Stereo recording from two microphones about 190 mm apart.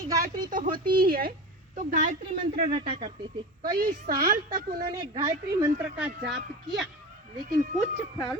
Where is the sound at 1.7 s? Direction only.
40° right (ahead or behind).